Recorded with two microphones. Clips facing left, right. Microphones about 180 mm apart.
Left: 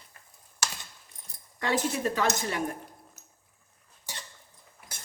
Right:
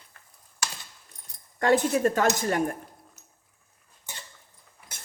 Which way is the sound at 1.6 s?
50° right (ahead or behind).